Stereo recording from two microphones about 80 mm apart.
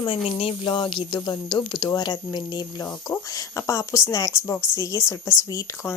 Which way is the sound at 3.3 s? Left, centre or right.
Left.